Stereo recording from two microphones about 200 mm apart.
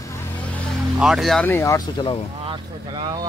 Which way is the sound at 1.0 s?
Centre (ahead or behind).